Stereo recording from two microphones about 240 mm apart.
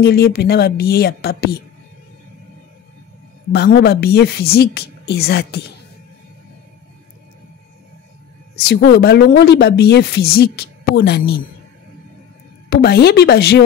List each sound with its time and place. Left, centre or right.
0.0 s a woman's voice: left
3.5 s a woman's voice: left
8.5 s speech: left
12.6 s speech: left